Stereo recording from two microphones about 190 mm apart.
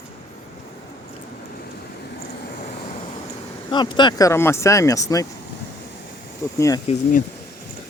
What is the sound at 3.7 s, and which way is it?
Speech, 25° left (ahead or behind).